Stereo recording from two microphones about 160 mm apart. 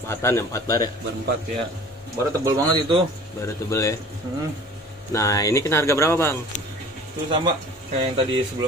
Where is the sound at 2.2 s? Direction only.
20° right (ahead or behind).